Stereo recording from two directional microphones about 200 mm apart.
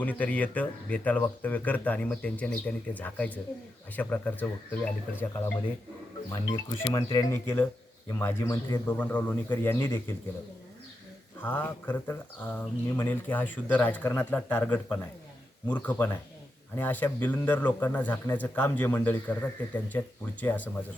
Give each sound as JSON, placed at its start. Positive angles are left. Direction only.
{"t": 0.0, "sound": "speech", "side_deg": 10}
{"t": 6.5, "sound": "speech", "side_deg": 20}
{"t": 11.4, "sound": "speech", "side_deg": 5}